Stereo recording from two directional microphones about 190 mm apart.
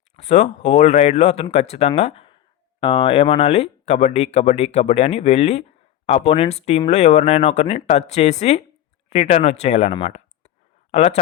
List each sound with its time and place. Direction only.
0.2 s speech: 40° left (ahead or behind)
10.0 s a sound: 35° left (ahead or behind)
10.9 s speech: 35° left (ahead or behind)